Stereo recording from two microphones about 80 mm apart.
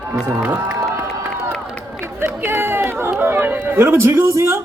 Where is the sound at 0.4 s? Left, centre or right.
Right.